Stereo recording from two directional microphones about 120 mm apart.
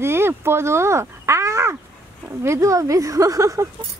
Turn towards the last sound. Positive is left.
turn(degrees=-25)  # may be behind; listen again after turning